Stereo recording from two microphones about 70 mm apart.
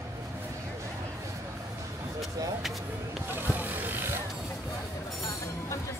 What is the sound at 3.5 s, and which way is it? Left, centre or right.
Vehicle, right.